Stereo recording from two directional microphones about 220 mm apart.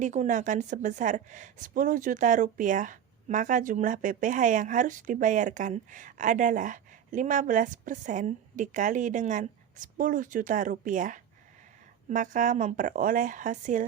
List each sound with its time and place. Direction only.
0.0 s a woman's voice: 35° right (ahead or behind)